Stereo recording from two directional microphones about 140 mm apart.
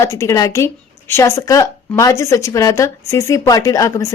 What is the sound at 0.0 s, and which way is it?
Speech, 20° left (ahead or behind).